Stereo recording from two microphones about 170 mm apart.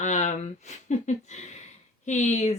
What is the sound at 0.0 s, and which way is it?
Speech, 45° left (ahead or behind).